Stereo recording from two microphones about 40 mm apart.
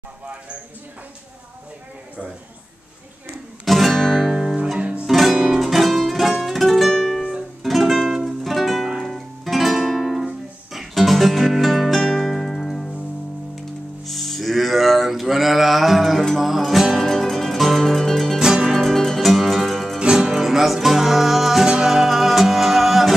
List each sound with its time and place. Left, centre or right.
3.6 s music: centre
4.3 s music: centre
5.0 s music: centre
7.6 s music: centre
14.0 s music: centre
17.0 s music: centre
18.4 s music: centre
18.8 s music: centre
20.1 s music: centre